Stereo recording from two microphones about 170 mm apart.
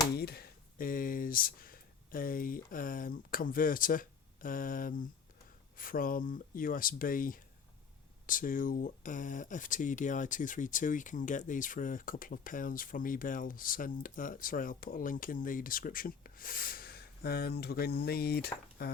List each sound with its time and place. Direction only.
0.2 s speech: 65° left (ahead or behind)